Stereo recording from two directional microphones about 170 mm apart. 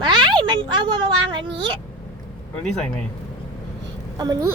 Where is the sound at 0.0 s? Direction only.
25° right (ahead or behind).